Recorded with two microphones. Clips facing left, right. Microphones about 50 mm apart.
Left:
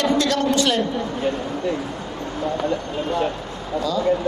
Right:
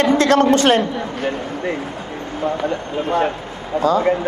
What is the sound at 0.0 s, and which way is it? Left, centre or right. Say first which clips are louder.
A woman's voice: right 6 dB; right.